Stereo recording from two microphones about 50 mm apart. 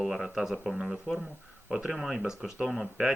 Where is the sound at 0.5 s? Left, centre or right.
Centre.